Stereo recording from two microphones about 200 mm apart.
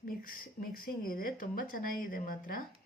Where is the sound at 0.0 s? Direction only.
45° left (ahead or behind).